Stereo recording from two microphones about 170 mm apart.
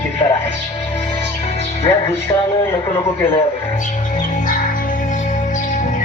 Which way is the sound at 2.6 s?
15° left (ahead or behind).